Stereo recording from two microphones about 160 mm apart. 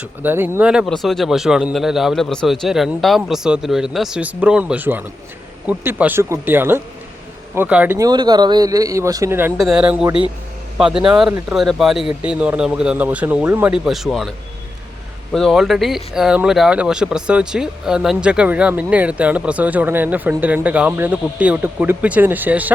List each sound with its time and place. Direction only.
0.2 s speech: 10° right (ahead or behind)
7.9 s speech: 25° right (ahead or behind)
9.6 s speech: 5° right (ahead or behind)